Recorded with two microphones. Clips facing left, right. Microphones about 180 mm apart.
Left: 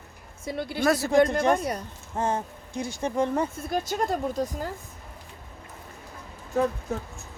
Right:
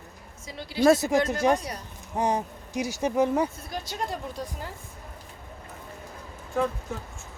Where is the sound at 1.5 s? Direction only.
50° left (ahead or behind).